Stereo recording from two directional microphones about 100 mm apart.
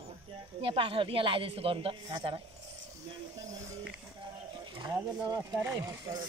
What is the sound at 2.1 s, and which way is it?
Speech, 55° right (ahead or behind).